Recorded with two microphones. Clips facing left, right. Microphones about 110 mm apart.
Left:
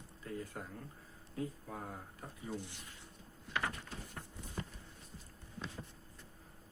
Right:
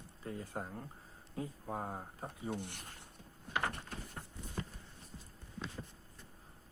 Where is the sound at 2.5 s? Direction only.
60° right (ahead or behind).